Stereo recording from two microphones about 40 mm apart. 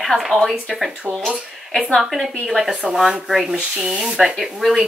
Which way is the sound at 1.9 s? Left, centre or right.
Centre.